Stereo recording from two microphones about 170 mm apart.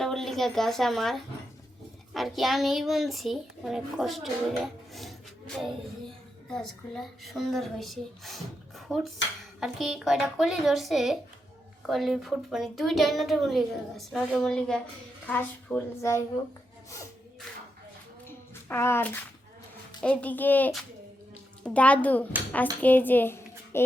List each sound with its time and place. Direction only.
0.0 s a child's voice: centre (ahead or behind)
6.5 s a child's voice: centre (ahead or behind)
9.6 s a child's voice: centre (ahead or behind); by 16.2 s 15° left (ahead or behind)
18.3 s child singing: 15° left (ahead or behind)
20.0 s a woman's voice: 10° left (ahead or behind)